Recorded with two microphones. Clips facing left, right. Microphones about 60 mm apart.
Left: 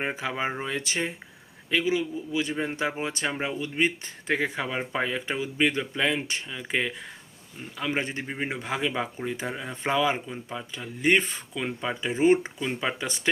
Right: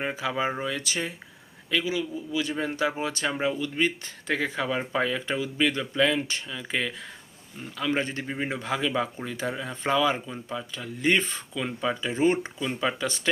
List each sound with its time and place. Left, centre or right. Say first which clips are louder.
0.0 s speech: right 1 dB; left